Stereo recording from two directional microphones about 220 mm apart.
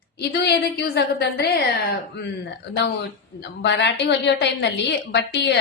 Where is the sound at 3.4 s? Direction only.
50° left (ahead or behind).